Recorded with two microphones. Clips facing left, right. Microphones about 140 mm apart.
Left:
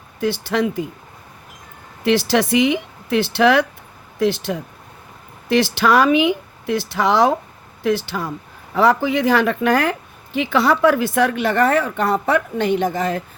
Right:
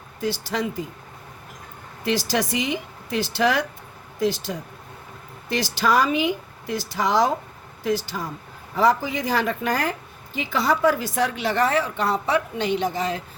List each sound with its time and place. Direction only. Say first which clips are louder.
0.4 s a woman's voice: left 6 dB; 60° left (ahead or behind)
2.0 s a woman's voice: left 7 dB; 65° left (ahead or behind)